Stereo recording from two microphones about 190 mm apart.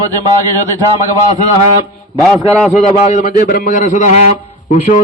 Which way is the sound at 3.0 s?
40° left (ahead or behind).